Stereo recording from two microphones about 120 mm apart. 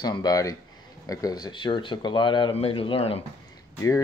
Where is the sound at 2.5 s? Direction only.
50° left (ahead or behind).